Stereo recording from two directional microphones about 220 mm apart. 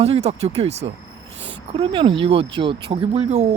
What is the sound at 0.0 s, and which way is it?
Speech, 30° right (ahead or behind).